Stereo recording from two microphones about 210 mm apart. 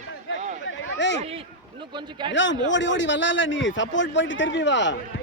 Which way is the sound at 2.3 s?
60° left (ahead or behind).